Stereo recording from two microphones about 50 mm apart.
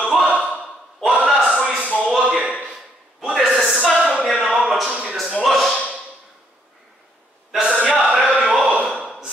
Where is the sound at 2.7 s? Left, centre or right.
Centre.